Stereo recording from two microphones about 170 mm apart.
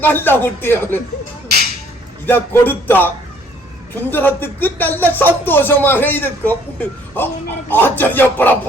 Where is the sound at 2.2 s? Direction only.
10° left (ahead or behind).